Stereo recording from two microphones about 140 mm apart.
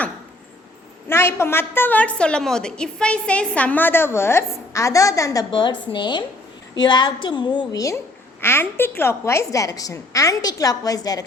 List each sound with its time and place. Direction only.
1.0 s a woman's voice: 15° left (ahead or behind)